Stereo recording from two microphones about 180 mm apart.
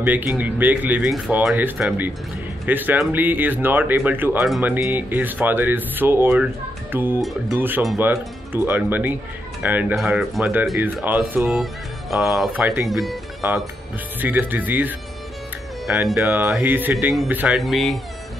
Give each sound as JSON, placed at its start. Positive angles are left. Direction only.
{"t": 0.0, "sound": "speech", "side_deg": -10}
{"t": 8.1, "sound": "speech", "side_deg": -10}